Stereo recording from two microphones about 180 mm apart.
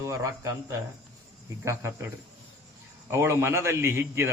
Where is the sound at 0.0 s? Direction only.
15° right (ahead or behind).